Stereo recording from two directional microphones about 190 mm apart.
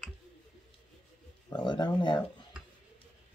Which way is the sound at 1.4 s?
25° left (ahead or behind).